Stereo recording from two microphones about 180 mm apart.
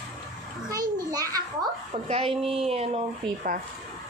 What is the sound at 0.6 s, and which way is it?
A child's voice, 20° right (ahead or behind).